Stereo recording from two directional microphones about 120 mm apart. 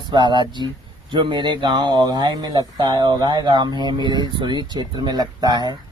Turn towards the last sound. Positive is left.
turn(degrees=-35)  # may be behind; listen again after turning